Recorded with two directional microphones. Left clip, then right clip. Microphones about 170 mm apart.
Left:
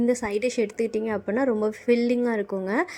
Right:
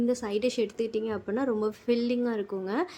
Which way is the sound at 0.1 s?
30° left (ahead or behind).